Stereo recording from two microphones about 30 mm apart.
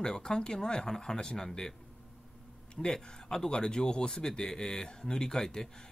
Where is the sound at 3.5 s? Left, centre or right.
Left.